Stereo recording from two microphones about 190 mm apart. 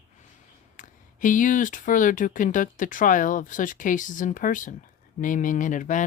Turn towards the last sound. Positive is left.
turn(degrees=40)  # may be behind; listen again after turning